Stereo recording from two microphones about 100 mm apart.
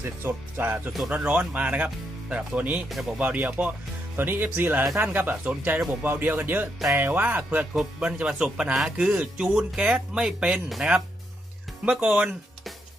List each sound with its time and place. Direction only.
0.0 s speech: 20° right (ahead or behind)
2.9 s speech: centre (ahead or behind)
3.2 s speech: 15° right (ahead or behind)
12.0 s speech: 15° right (ahead or behind)